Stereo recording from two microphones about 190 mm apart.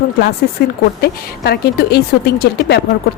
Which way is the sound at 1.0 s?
55° left (ahead or behind).